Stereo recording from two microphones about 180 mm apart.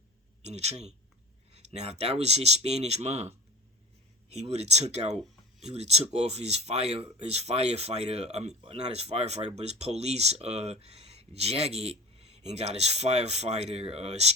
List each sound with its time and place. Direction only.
0.4 s speech: 35° right (ahead or behind)